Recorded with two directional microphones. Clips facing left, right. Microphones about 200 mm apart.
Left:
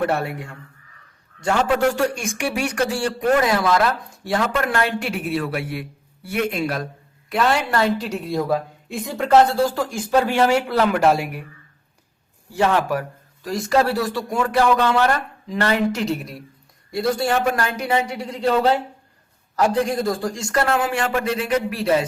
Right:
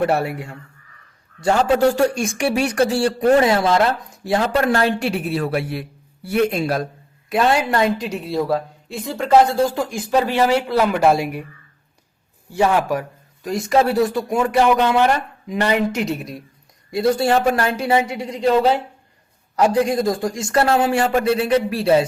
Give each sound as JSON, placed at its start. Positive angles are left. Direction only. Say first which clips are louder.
{"t": 0.0, "sound": "a man's voice", "louder": "right 3 dB", "side_deg": -25}
{"t": 7.3, "sound": "a man's voice", "louder": "right 3 dB", "side_deg": -25}
{"t": 8.0, "sound": "speech", "louder": "right 1 dB", "side_deg": -5}
{"t": 9.7, "sound": "speech", "louder": "even", "side_deg": -10}
{"t": 12.5, "sound": "a man's voice", "louder": "right 2 dB", "side_deg": -10}
{"t": 16.9, "sound": "a man's voice", "louder": "right 4 dB", "side_deg": -25}